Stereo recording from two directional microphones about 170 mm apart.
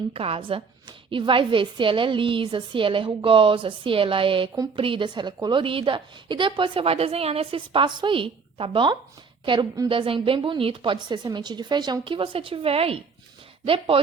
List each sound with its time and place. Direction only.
0.1 s a woman's voice: 35° right (ahead or behind)